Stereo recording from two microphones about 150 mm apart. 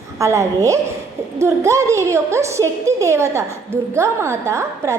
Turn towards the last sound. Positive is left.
turn(degrees=-20)  # may be behind; listen again after turning